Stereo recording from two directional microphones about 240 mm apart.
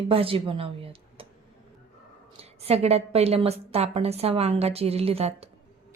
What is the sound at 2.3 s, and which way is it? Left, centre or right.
Speech, right.